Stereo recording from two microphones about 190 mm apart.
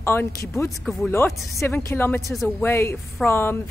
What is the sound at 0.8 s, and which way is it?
Speech, centre (ahead or behind).